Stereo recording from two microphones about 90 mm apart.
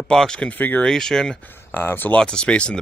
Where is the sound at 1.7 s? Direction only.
25° left (ahead or behind).